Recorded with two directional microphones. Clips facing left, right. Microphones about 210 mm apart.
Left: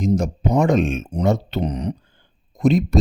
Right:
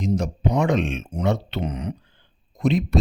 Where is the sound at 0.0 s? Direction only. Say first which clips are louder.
Left 3 dB; 45° left (ahead or behind).